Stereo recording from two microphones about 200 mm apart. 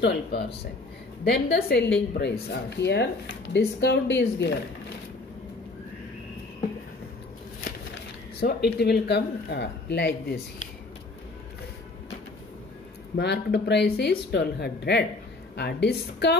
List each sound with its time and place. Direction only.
0.0 s speech: 55° left (ahead or behind)
8.4 s speech: 55° left (ahead or behind)
13.1 s speech: 55° left (ahead or behind)